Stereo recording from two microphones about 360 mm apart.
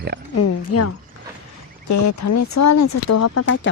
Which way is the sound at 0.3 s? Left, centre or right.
Left.